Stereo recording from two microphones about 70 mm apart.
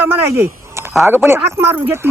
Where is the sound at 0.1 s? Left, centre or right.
Right.